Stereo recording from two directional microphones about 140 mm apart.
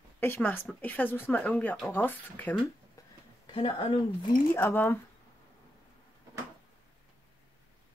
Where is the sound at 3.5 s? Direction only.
40° left (ahead or behind).